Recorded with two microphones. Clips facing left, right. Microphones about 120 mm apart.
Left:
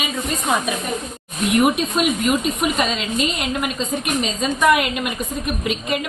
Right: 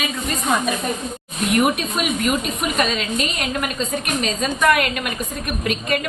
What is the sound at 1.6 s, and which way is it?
A woman's voice, 20° left (ahead or behind).